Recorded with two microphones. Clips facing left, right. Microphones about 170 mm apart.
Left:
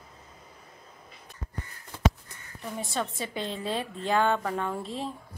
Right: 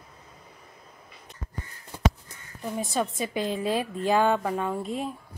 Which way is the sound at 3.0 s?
15° right (ahead or behind).